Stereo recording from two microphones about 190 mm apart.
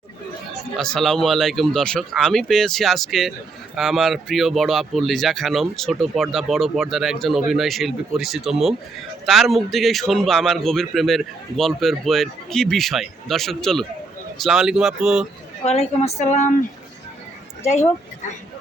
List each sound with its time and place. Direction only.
0.8 s a man's voice: centre (ahead or behind)
15.6 s a woman's voice: 35° left (ahead or behind)
17.6 s speech: 35° left (ahead or behind)